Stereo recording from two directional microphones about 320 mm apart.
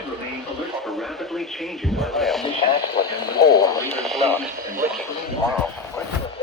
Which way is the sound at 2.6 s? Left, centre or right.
Centre.